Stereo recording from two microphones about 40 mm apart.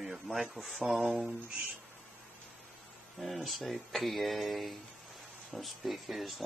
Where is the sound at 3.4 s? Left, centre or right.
Centre.